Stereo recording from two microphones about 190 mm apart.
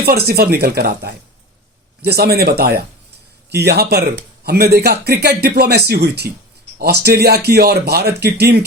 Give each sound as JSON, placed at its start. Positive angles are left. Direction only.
{"t": 0.0, "sound": "speech", "side_deg": -55}